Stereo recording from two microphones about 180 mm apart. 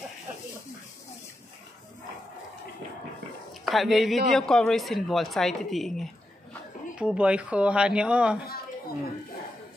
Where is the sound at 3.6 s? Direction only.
Centre (ahead or behind).